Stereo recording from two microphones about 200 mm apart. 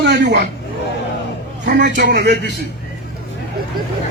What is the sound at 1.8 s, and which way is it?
Speech, 60° right (ahead or behind).